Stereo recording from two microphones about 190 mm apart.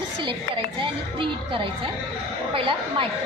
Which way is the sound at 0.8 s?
25° right (ahead or behind).